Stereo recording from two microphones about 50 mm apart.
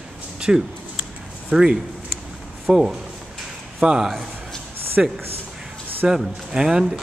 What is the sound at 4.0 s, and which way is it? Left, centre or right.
A man's voice, centre.